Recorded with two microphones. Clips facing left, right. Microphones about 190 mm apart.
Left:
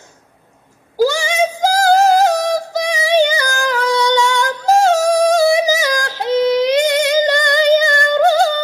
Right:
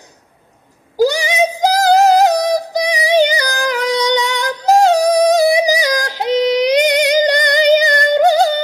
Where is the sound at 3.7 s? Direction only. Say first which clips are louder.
Left 1 dB; 20° right (ahead or behind).